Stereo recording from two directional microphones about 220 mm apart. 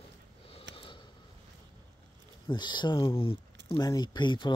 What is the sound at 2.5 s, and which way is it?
Speech, 20° left (ahead or behind).